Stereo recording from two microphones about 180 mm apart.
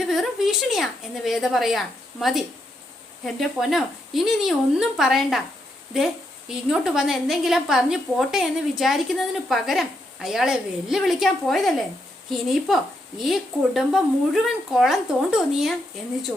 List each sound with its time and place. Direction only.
0.1 s a woman's voice: centre (ahead or behind)